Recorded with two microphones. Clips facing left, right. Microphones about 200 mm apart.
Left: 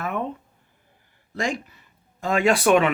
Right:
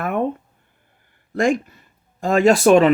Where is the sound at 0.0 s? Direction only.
55° right (ahead or behind).